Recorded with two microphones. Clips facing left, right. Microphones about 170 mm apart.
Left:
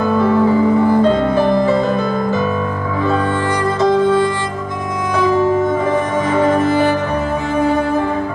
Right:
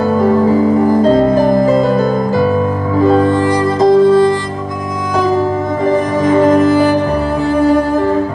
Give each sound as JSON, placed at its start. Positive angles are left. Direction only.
{"t": 0.0, "sound": "music", "side_deg": -40}
{"t": 6.2, "sound": "music", "side_deg": -40}